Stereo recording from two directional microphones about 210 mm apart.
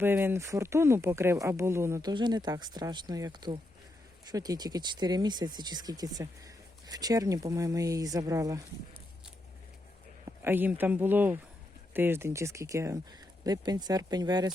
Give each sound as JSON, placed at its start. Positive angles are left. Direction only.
{"t": 0.0, "sound": "speech", "side_deg": -10}
{"t": 10.4, "sound": "speech", "side_deg": -10}